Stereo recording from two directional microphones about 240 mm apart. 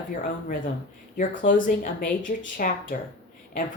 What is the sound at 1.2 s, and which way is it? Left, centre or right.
Speech, left.